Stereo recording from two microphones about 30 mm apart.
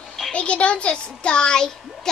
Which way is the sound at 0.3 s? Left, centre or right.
Left.